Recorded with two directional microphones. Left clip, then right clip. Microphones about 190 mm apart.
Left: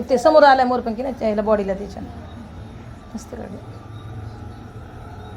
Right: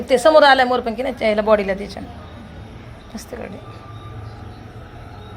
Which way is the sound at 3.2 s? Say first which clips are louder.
Right 4 dB; centre (ahead or behind).